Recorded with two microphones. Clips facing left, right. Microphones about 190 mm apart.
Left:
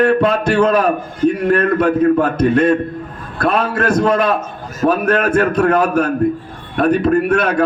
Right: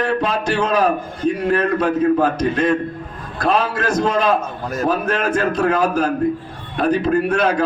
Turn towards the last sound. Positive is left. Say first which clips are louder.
# left 3 dB
turn(degrees=60)  # may be behind; listen again after turning